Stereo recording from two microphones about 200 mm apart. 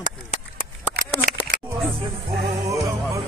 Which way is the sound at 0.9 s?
45° right (ahead or behind).